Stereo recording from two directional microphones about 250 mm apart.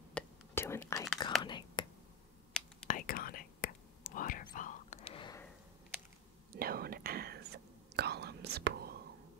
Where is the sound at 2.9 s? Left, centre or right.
Left; by 5.5 s centre.